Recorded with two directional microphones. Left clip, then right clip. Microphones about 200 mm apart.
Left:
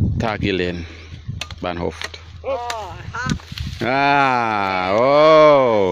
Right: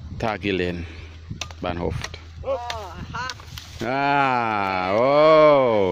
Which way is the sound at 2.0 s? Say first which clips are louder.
Left 4 dB; 45° left (ahead or behind).